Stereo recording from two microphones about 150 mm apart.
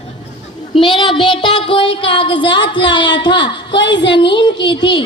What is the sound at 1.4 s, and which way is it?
Music, 35° left (ahead or behind).